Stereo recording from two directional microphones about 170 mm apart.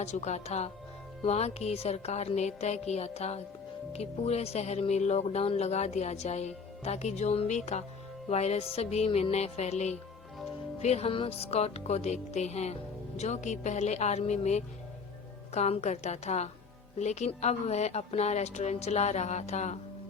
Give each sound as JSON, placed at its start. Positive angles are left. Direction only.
{"t": 0.0, "sound": "speech", "side_deg": 40}